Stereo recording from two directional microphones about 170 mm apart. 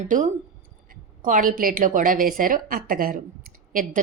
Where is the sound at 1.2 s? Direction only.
50° right (ahead or behind).